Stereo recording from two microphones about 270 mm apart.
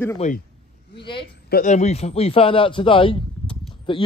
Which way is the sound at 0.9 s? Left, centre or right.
Centre.